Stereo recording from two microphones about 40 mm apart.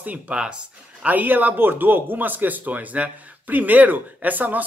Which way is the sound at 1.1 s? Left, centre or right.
Right.